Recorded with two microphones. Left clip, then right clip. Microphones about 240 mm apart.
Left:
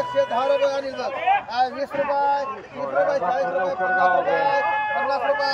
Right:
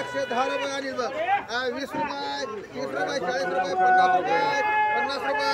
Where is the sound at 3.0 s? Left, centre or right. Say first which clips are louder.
Left 6 dB; right.